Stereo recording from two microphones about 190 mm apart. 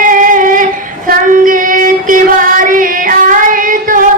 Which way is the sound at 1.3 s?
45° right (ahead or behind).